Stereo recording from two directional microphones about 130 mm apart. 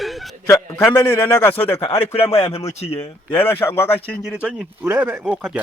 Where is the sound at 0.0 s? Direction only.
Centre (ahead or behind).